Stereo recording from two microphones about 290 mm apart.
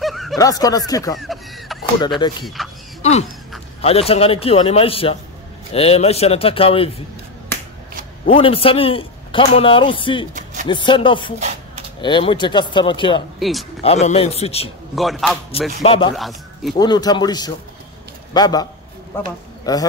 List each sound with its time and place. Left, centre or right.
0.0 s snicker: centre
0.4 s a man's voice: centre
1.1 s a sound: centre
2.4 s speech: centre
3.0 s a man's voice: left
8.3 s a man's voice: centre
10.3 s a sound: right
10.7 s a man's voice: centre
13.4 s speech: centre
13.8 s a man's voice: left
15.0 s a man's voice: centre
15.8 s a man's voice: centre
16.2 s a man's voice: centre
16.7 s a man's voice: centre